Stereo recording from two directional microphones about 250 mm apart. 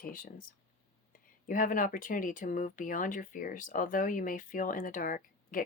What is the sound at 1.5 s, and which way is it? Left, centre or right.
Speech, left.